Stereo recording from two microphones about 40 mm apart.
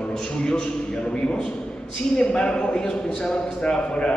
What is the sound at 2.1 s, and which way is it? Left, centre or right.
Speech, left.